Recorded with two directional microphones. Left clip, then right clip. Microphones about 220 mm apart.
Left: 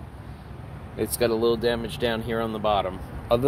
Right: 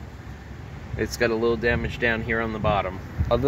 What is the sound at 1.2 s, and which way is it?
Speech, 5° left (ahead or behind).